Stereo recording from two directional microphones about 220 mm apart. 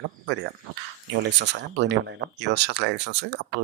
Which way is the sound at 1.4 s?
50° right (ahead or behind).